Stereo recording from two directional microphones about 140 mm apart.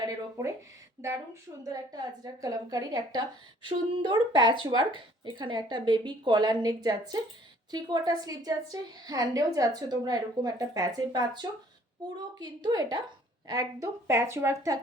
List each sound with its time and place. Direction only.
1.0 s a woman's voice: 20° right (ahead or behind)